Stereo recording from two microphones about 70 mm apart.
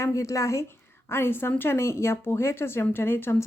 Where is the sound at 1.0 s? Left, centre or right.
Left.